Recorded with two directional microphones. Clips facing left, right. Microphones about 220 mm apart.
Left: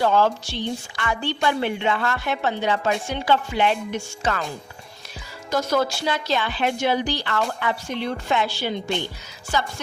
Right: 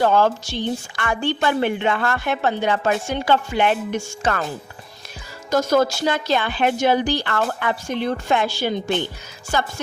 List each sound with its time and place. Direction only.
0.0 s a woman's voice: 50° right (ahead or behind)
5.5 s a woman's voice: 45° right (ahead or behind)